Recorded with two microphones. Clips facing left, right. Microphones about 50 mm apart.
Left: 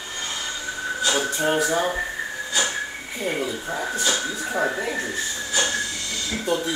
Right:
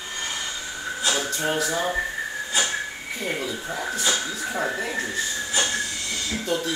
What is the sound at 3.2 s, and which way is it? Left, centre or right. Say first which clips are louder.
Speech: left 3 dB; centre.